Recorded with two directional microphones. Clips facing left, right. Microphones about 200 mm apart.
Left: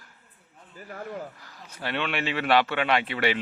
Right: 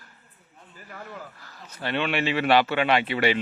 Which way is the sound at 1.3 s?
15° left (ahead or behind).